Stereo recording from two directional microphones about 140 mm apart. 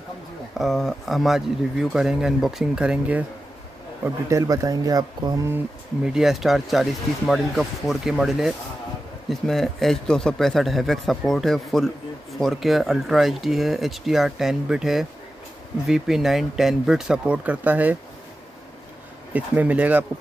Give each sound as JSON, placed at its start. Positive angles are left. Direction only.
{"t": 0.6, "sound": "a man's voice", "side_deg": 0}
{"t": 4.0, "sound": "speech", "side_deg": -20}
{"t": 6.0, "sound": "a man's voice", "side_deg": -5}
{"t": 19.3, "sound": "speech", "side_deg": -10}